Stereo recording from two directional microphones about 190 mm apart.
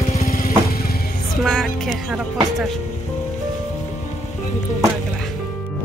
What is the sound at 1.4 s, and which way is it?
Speech, centre (ahead or behind).